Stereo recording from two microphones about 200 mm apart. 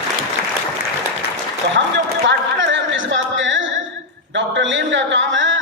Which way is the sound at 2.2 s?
65° right (ahead or behind).